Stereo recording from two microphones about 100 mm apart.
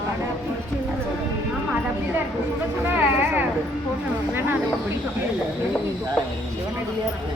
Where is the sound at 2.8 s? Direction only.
20° right (ahead or behind).